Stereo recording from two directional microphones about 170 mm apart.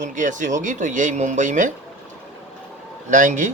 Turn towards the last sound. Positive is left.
turn(degrees=-45)  # may be behind; listen again after turning